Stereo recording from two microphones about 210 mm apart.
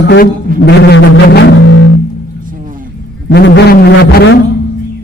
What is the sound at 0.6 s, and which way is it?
Music, 55° left (ahead or behind).